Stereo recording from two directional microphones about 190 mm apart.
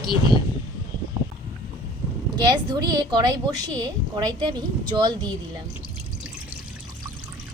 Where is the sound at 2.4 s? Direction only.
20° right (ahead or behind).